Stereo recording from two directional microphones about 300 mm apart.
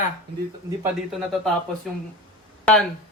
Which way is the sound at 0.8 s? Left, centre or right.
Centre.